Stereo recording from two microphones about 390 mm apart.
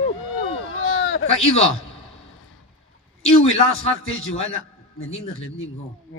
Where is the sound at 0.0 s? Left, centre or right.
Left.